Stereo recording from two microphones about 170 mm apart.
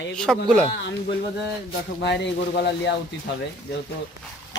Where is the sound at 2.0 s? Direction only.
90° left.